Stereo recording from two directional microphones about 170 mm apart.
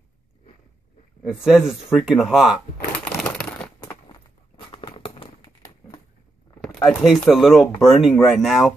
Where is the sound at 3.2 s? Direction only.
5° left (ahead or behind).